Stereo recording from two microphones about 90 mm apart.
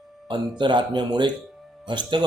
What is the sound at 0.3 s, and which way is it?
Speech, 60° right (ahead or behind).